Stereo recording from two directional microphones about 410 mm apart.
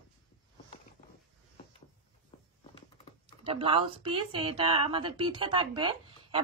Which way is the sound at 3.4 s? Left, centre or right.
Centre.